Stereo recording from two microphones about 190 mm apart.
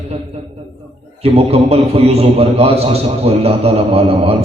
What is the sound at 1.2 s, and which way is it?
A man's voice, 30° right (ahead or behind).